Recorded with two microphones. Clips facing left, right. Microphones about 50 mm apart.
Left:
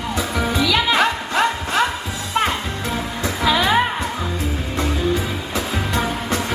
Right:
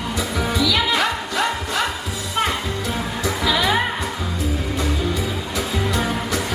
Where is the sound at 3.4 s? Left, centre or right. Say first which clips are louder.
Left 3 dB; left.